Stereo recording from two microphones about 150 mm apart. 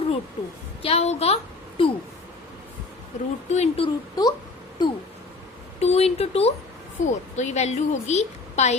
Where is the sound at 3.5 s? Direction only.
45° left (ahead or behind).